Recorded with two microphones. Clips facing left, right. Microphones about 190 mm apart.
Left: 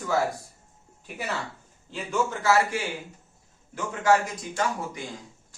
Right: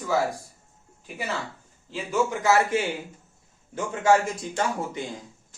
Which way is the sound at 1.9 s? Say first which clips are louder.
Right 2 dB; 10° right (ahead or behind).